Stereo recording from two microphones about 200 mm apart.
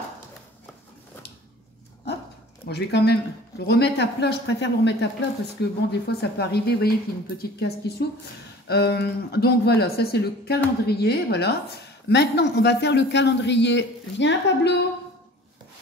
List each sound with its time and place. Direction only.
2.7 s speech: 55° left (ahead or behind)